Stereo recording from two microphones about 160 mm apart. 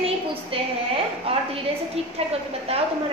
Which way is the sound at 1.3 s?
35° right (ahead or behind).